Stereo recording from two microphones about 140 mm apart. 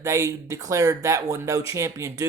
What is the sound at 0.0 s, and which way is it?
Speech, 25° right (ahead or behind).